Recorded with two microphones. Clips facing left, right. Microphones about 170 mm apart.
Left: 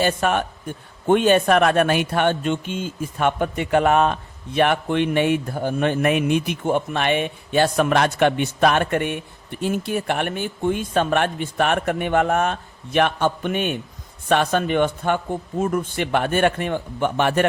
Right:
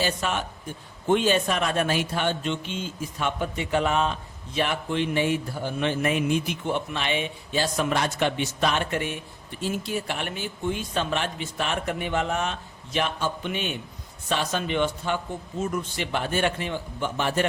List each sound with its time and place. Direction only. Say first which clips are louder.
0.0 s speech: left 7 dB; 55° left (ahead or behind)